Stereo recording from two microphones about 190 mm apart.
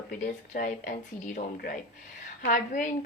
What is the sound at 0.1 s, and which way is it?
Speech, 40° left (ahead or behind).